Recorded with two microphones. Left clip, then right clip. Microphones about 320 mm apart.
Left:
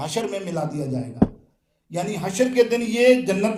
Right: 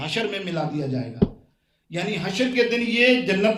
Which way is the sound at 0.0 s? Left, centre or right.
Centre.